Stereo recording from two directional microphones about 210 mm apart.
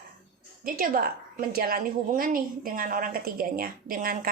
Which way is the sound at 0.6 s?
45° right (ahead or behind).